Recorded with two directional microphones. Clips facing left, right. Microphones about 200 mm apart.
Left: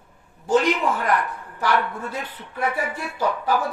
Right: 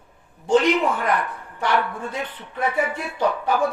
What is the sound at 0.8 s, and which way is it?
Speech, centre (ahead or behind).